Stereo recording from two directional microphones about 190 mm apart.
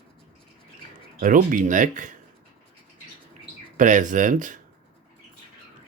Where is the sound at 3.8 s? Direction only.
40° right (ahead or behind).